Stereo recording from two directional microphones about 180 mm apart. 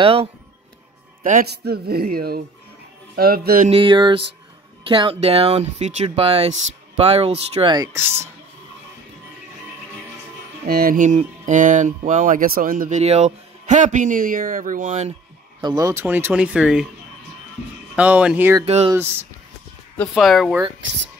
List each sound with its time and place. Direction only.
0.0 s speech: 30° right (ahead or behind)
1.2 s speech: 55° right (ahead or behind)
3.6 s speech: 30° right (ahead or behind); by 8.3 s 15° right (ahead or behind)
10.7 s speech: 55° right (ahead or behind)
15.6 s speech: 20° right (ahead or behind)
17.9 s speech: 5° right (ahead or behind)
20.2 s speech: centre (ahead or behind)